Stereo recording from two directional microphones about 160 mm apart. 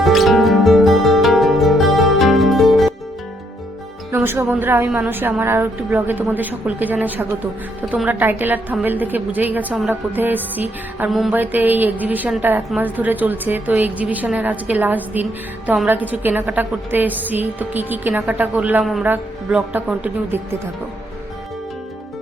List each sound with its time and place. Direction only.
0.0 s music: centre (ahead or behind)
4.1 s a woman's voice: 15° right (ahead or behind)
11.1 s a sound: centre (ahead or behind)
11.3 s a woman's voice: 10° right (ahead or behind)